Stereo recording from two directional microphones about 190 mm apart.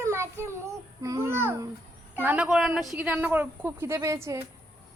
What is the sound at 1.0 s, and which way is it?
Babbling, 15° right (ahead or behind).